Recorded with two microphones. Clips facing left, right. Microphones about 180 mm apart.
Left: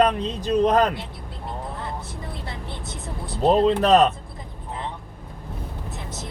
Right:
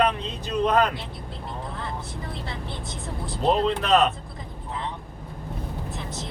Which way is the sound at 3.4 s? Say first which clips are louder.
Left 5 dB; 40° left (ahead or behind).